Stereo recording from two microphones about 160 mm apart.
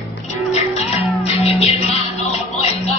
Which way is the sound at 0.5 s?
40° left (ahead or behind).